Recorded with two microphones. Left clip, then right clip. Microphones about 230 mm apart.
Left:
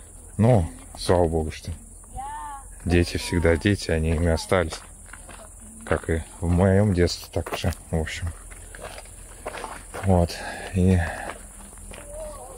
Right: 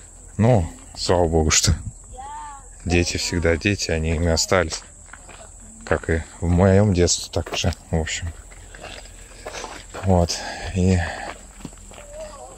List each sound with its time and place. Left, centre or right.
0.4 s speech: centre
1.3 s speech: right
2.9 s speech: centre
9.4 s a sound: centre